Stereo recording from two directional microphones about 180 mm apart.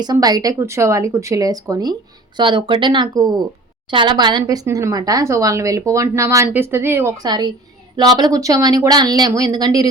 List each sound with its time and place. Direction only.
0.0 s speech: 20° right (ahead or behind)